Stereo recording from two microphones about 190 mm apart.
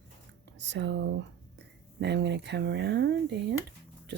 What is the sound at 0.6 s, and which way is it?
Speech, 70° right (ahead or behind).